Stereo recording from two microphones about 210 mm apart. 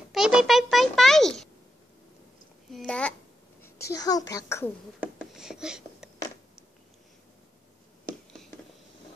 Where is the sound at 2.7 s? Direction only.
5° left (ahead or behind).